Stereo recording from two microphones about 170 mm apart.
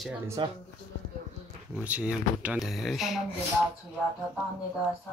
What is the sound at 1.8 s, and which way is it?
Speech, 10° right (ahead or behind).